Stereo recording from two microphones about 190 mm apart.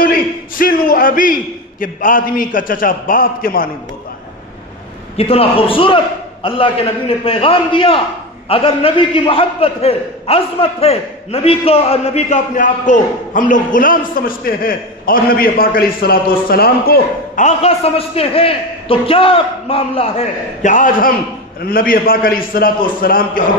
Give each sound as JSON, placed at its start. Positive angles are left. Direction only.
{"t": 0.0, "sound": "a man's voice", "side_deg": 50}
{"t": 5.1, "sound": "a man's voice", "side_deg": 30}